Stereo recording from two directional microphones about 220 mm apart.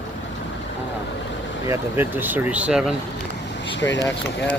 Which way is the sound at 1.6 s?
10° right (ahead or behind).